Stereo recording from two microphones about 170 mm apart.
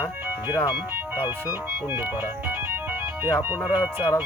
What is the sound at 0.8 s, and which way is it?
Speech, 10° right (ahead or behind).